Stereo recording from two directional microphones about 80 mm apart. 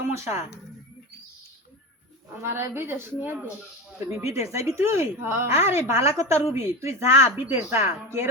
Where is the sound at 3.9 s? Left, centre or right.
Right.